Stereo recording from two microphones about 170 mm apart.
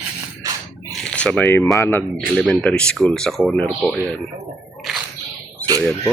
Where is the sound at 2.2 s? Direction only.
5° left (ahead or behind).